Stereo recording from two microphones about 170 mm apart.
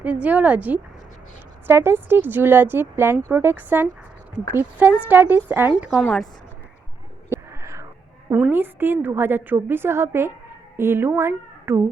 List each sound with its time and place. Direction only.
0.0 s speech: 10° right (ahead or behind)
6.0 s speech: 5° left (ahead or behind)
7.5 s a sound: 15° right (ahead or behind)
8.3 s speech: 10° right (ahead or behind)